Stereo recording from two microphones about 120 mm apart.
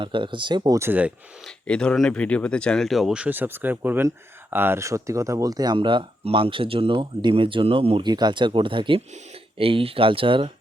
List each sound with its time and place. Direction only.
0.0 s speech: 45° right (ahead or behind)
0.8 s speech: 15° right (ahead or behind)
1.5 s speech: 10° left (ahead or behind); by 8.0 s 50° right (ahead or behind)
8.0 s speech: 35° right (ahead or behind)